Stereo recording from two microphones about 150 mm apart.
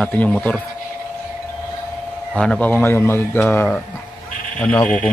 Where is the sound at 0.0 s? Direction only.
10° left (ahead or behind).